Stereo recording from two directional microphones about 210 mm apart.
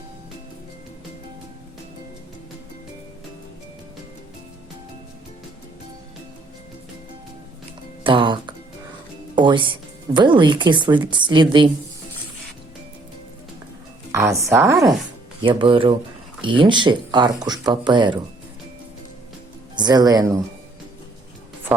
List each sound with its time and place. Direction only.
8.0 s music: 25° right (ahead or behind)
9.3 s speech: 20° right (ahead or behind)
14.1 s speech: 15° right (ahead or behind)
19.7 s speech: 20° right (ahead or behind)
21.7 s music: 5° right (ahead or behind)